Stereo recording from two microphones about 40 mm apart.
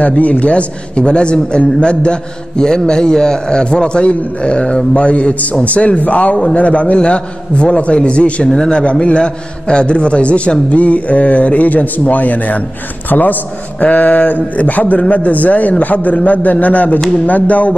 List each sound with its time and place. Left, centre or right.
0.2 s a man's voice: left
8.5 s a man's voice: centre; by 17.7 s left